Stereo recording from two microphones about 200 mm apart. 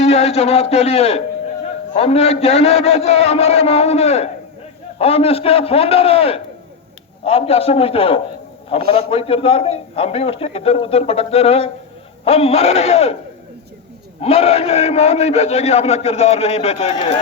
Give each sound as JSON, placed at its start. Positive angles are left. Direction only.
{"t": 0.0, "sound": "a man's voice", "side_deg": 30}
{"t": 14.2, "sound": "a man's voice", "side_deg": 30}